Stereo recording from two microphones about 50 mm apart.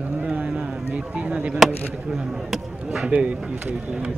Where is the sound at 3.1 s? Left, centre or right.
Right.